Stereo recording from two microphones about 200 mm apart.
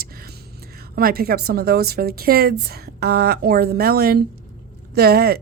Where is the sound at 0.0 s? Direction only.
50° right (ahead or behind).